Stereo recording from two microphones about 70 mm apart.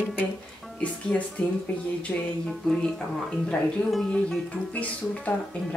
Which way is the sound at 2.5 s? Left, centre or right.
Centre.